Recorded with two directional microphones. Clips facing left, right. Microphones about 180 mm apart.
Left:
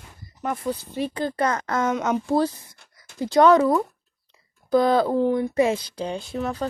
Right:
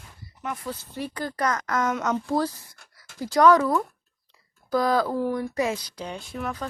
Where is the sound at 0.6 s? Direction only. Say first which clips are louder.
Left 6 dB; 15° left (ahead or behind).